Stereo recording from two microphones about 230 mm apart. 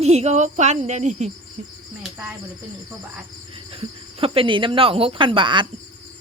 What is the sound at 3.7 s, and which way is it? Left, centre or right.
Speech, right.